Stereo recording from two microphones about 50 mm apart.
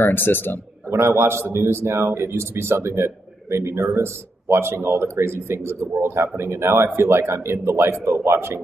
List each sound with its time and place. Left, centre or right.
0.0 s a man's voice: left
0.8 s a man's voice: right